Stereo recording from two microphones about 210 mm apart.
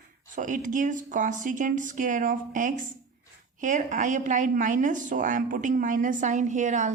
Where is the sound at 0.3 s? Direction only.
40° right (ahead or behind).